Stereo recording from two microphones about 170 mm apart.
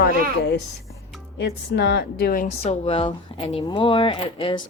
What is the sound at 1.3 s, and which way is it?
A woman's voice, 90° left.